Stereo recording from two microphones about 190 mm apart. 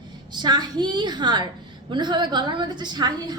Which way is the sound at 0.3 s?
20° right (ahead or behind).